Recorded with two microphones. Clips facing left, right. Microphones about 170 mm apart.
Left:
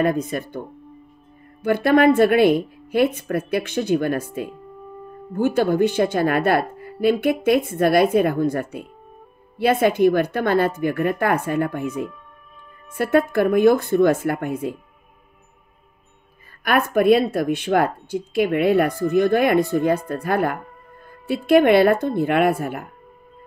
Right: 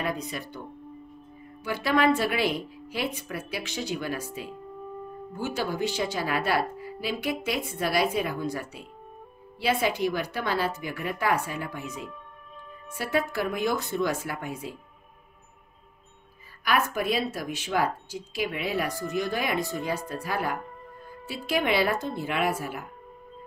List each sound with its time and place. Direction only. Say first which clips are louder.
0.0 s a woman's voice: left 10 dB; 50° left (ahead or behind)
16.6 s speech: left 10 dB; 55° left (ahead or behind)